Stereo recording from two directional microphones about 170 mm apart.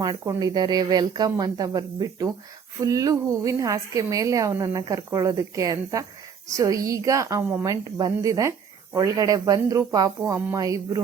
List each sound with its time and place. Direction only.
0.0 s a woman's voice: 20° right (ahead or behind)